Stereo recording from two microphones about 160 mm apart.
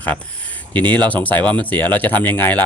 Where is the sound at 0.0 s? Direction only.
10° left (ahead or behind).